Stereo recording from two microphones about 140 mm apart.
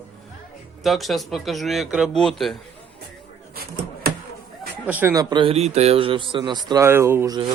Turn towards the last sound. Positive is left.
turn(degrees=-35)  # may be behind; listen again after turning